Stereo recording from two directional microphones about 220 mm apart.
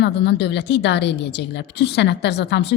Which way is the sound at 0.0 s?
50° left (ahead or behind).